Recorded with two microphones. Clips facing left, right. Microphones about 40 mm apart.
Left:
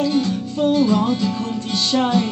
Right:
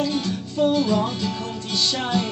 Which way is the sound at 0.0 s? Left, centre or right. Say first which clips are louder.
Left 5 dB; left.